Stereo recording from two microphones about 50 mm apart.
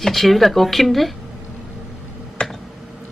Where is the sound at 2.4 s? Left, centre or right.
Centre.